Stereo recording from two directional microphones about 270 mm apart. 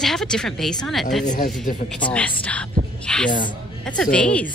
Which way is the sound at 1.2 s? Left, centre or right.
Left.